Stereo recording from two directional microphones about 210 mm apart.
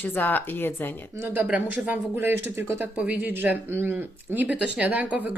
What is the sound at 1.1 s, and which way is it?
Speech, 10° right (ahead or behind).